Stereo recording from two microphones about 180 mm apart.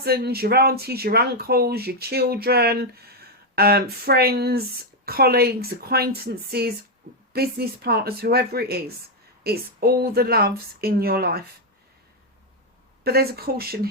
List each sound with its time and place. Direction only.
0.0 s speech: 60° right (ahead or behind)
13.1 s speech: 60° right (ahead or behind)